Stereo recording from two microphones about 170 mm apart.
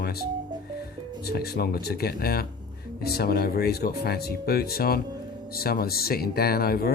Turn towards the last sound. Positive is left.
turn(degrees=65)  # may be behind; listen again after turning